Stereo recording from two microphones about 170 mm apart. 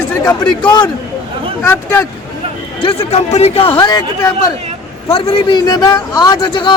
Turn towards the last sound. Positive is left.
turn(degrees=30)  # may be behind; listen again after turning